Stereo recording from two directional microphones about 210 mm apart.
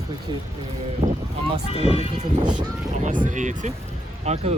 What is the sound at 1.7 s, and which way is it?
Speech, 30° left (ahead or behind).